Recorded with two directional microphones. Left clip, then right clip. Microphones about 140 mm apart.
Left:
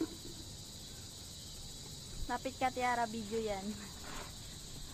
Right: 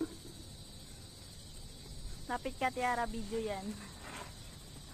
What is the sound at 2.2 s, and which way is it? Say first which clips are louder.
Speech: right 1 dB; 10° left (ahead or behind).